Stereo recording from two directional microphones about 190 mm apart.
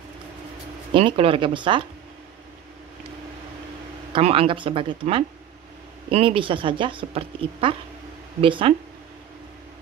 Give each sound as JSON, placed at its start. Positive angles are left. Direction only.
{"t": 0.9, "sound": "a woman's voice", "side_deg": -30}
{"t": 4.1, "sound": "a woman's voice", "side_deg": -30}